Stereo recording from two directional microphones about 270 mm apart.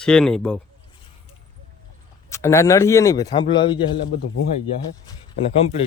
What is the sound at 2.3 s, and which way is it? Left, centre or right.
Speech, centre.